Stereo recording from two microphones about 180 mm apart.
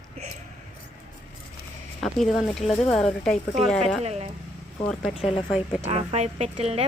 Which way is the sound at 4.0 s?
35° right (ahead or behind).